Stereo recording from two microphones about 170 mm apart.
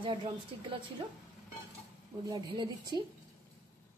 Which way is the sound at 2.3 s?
25° right (ahead or behind).